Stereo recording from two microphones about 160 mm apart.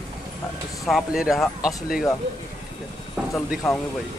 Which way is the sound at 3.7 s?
Centre (ahead or behind).